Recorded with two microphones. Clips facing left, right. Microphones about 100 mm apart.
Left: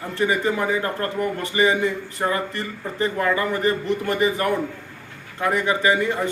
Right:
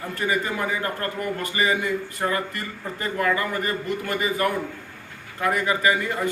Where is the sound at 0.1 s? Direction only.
25° left (ahead or behind).